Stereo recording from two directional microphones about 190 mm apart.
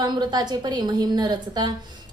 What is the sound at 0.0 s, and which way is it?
A woman's voice, 20° right (ahead or behind).